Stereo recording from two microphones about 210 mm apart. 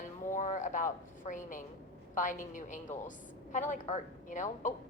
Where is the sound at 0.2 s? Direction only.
40° left (ahead or behind).